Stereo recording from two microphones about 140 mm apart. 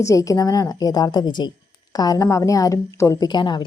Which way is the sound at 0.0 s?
25° left (ahead or behind).